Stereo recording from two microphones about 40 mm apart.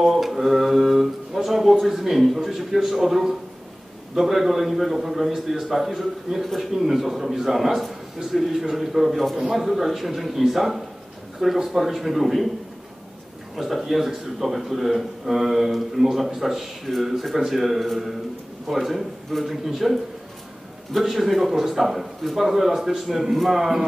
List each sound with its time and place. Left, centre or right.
0.0 s a man's voice: centre
13.6 s a man's voice: centre